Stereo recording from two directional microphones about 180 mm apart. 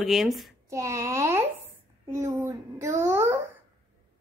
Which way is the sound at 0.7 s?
15° right (ahead or behind).